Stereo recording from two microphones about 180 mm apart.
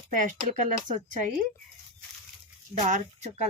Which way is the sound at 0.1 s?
45° right (ahead or behind).